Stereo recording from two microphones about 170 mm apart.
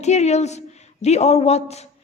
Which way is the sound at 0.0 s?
40° left (ahead or behind).